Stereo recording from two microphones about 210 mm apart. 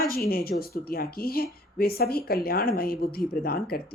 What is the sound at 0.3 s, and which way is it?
Speech, 45° left (ahead or behind).